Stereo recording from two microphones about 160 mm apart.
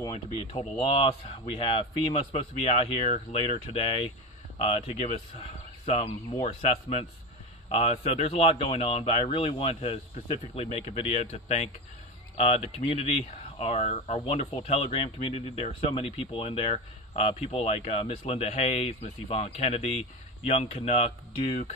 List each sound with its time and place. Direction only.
0.1 s speech: 35° left (ahead or behind)
2.3 s speech: 40° left (ahead or behind)